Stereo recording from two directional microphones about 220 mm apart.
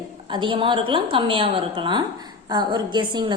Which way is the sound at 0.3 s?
20° right (ahead or behind).